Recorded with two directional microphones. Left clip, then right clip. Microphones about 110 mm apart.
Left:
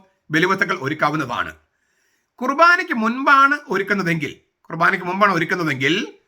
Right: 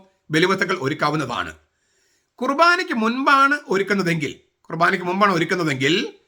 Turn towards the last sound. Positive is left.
turn(degrees=-25)  # may be behind; listen again after turning